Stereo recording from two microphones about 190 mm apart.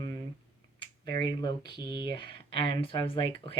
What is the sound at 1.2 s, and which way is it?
Speech, 20° left (ahead or behind).